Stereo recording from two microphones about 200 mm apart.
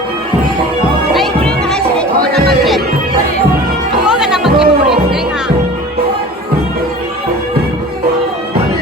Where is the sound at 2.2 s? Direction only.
50° right (ahead or behind).